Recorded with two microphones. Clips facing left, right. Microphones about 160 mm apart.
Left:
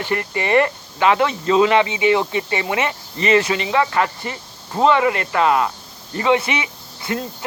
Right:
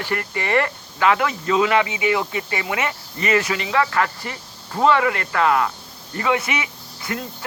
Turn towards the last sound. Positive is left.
turn(degrees=25)  # may be behind; listen again after turning